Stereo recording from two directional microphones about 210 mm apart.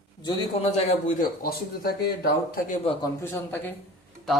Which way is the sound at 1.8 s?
45° left (ahead or behind).